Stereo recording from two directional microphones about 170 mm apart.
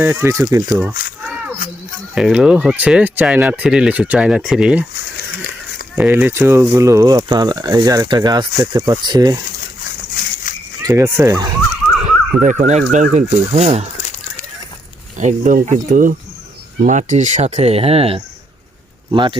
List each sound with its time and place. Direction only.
0.0 s speech: 15° right (ahead or behind)
2.1 s speech: 5° right (ahead or behind)
6.0 s speech: 10° right (ahead or behind)
10.5 s a sound: 50° left (ahead or behind)
10.8 s speech: 20° right (ahead or behind)
12.4 s speech: 45° right (ahead or behind)
15.2 s speech: 45° right (ahead or behind); by 19.4 s 30° right (ahead or behind)